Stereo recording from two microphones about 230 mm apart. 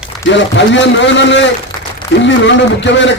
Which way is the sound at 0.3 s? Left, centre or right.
Left.